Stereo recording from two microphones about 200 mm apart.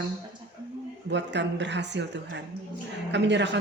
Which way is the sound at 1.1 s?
60° right (ahead or behind).